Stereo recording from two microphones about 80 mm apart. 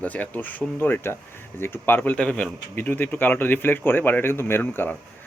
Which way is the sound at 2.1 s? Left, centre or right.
Centre.